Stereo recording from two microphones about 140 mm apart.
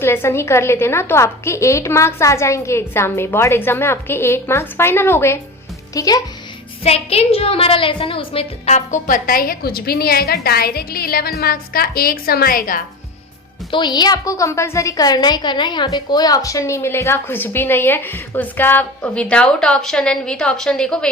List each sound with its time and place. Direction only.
0.0 s a woman's voice: 15° left (ahead or behind)
6.8 s a woman's voice: 45° left (ahead or behind); by 12.8 s 90° left
13.7 s a woman's voice: 35° left (ahead or behind); by 21.1 s 5° left (ahead or behind)